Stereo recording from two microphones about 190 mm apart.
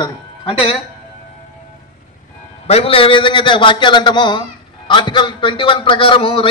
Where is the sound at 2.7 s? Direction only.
30° left (ahead or behind).